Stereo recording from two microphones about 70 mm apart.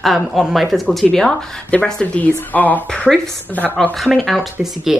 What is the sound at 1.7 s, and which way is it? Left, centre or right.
Speech, centre.